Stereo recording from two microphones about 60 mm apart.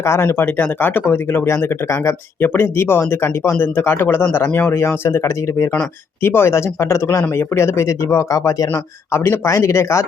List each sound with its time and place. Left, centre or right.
0.0 s speech: left
1.5 s speech: left
5.0 s speech: left
9.1 s speech: left